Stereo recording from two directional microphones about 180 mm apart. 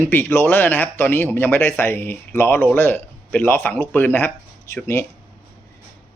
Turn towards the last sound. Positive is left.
turn(degrees=15)  # may be behind; listen again after turning